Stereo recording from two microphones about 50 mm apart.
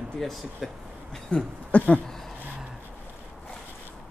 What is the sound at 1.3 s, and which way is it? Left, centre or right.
Speech, left.